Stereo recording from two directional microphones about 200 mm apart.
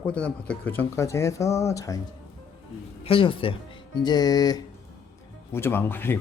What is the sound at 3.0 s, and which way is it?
Speech, 25° left (ahead or behind).